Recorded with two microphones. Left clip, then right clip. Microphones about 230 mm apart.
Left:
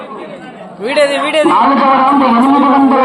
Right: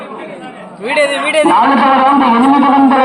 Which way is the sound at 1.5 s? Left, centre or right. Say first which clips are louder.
Even; right.